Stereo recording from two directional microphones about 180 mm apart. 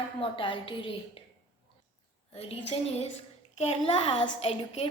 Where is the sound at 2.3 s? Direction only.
35° left (ahead or behind).